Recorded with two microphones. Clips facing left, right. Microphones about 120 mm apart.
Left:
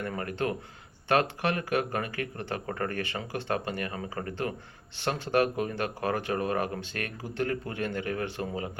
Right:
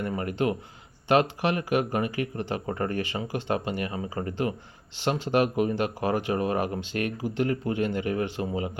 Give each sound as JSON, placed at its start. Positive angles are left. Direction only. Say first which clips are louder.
{"t": 0.0, "sound": "speech", "louder": "right 4 dB", "side_deg": -15}